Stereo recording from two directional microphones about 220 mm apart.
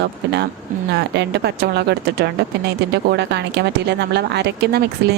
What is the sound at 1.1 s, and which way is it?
Speech, 50° right (ahead or behind).